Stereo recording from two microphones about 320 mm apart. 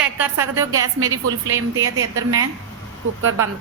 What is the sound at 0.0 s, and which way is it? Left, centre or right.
Speech, centre.